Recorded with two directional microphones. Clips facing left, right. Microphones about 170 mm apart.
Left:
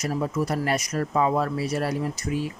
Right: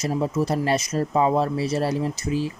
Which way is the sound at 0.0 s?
25° right (ahead or behind).